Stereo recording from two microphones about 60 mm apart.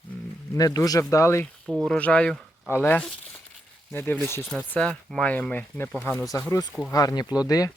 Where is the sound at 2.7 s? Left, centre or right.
Left.